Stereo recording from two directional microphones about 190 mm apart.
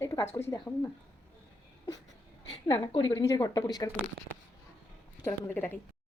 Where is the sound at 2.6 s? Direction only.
20° left (ahead or behind).